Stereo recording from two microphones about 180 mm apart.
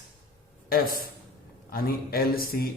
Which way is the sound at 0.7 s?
55° left (ahead or behind).